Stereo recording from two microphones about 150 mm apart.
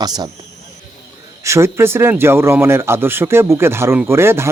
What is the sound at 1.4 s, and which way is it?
Speech, 20° right (ahead or behind).